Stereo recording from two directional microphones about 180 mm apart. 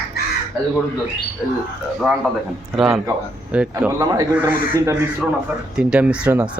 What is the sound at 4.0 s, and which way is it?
Speech, 20° right (ahead or behind).